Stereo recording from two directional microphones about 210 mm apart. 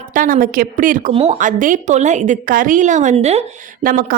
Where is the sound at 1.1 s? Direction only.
30° right (ahead or behind).